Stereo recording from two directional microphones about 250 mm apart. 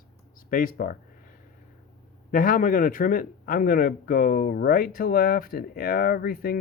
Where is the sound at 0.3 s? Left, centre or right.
Left.